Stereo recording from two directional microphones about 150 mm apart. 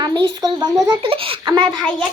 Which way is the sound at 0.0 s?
30° right (ahead or behind).